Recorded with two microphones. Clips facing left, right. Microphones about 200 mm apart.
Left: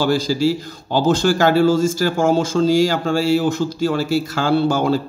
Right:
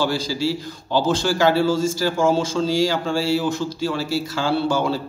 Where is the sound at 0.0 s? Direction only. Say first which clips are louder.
Left 5 dB; 45° left (ahead or behind).